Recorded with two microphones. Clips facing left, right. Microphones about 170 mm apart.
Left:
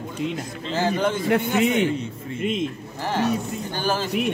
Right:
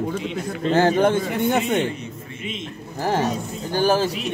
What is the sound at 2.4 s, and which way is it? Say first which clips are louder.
Speech: left 8 dB; 50° left (ahead or behind).